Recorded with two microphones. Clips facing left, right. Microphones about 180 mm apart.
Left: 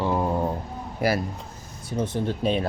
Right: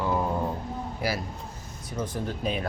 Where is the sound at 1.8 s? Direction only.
25° left (ahead or behind).